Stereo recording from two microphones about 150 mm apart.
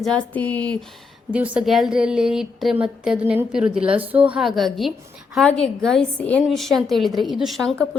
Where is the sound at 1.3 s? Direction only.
10° right (ahead or behind).